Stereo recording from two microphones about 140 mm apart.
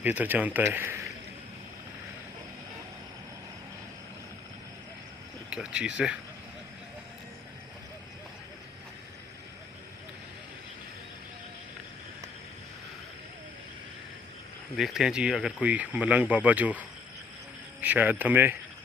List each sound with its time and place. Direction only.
0.0 s speech: 15° right (ahead or behind)
5.5 s speech: 5° right (ahead or behind)
14.8 s speech: 5° right (ahead or behind)
17.7 s speech: 10° right (ahead or behind)